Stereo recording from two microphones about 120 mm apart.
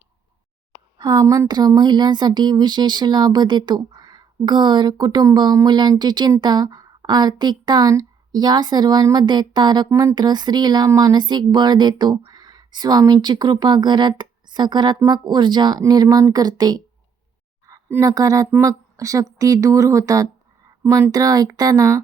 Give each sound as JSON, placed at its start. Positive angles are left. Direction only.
{"t": 0.9, "sound": "a woman's voice", "side_deg": -30}
{"t": 17.7, "sound": "a sound", "side_deg": -15}
{"t": 18.0, "sound": "speech", "side_deg": -30}
{"t": 21.1, "sound": "a woman's voice", "side_deg": -30}